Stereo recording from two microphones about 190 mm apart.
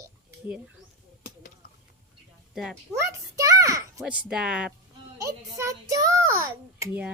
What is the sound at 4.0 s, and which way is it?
Speech, 5° right (ahead or behind).